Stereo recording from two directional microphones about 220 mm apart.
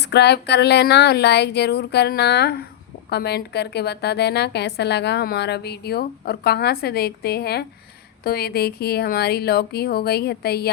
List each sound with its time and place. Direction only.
0.0 s a woman's voice: 50° left (ahead or behind)